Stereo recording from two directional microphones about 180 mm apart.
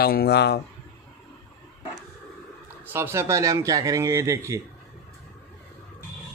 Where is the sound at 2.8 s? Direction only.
15° right (ahead or behind).